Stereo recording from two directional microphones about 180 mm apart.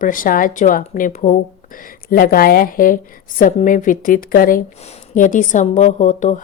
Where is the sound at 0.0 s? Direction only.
50° left (ahead or behind).